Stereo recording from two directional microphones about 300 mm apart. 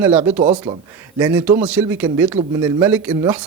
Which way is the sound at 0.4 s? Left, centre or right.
Right.